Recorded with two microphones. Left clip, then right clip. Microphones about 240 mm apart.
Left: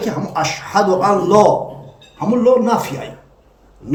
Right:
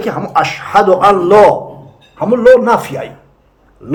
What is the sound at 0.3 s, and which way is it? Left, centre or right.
Speech, centre.